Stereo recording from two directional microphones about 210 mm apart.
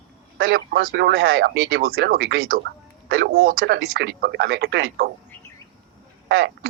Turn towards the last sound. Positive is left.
turn(degrees=-50)  # may be behind; listen again after turning